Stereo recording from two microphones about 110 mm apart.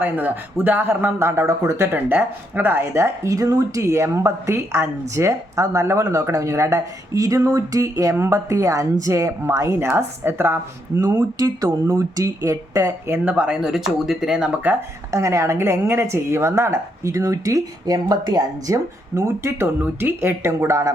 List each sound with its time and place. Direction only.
0.0 s speech: 15° right (ahead or behind)
13.2 s speech: 10° right (ahead or behind)
15.1 s speech: 30° right (ahead or behind)